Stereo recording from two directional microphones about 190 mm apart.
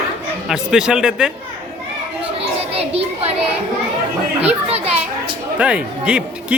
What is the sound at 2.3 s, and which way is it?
Children playing, 30° right (ahead or behind).